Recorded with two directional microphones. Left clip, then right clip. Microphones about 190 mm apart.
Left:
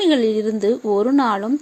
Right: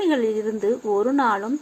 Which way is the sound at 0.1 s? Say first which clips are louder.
Left 4 dB; 50° left (ahead or behind).